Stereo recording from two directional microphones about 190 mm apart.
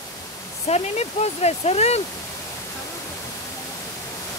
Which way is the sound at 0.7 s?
35° left (ahead or behind).